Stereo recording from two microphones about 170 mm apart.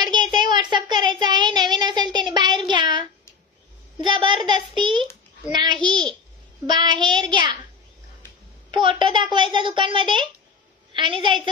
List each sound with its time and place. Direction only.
0.0 s child singing: 25° right (ahead or behind)
4.0 s a child's voice: 25° right (ahead or behind)
8.7 s a child's voice: 30° right (ahead or behind)